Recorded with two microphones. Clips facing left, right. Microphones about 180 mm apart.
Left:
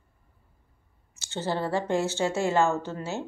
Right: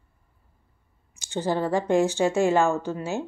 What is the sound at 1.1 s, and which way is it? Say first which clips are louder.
Speech: right 4 dB; 15° right (ahead or behind).